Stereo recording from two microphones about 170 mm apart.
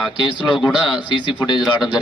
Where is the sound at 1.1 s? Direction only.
25° left (ahead or behind).